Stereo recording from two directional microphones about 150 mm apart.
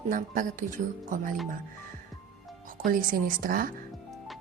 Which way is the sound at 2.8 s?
65° right (ahead or behind).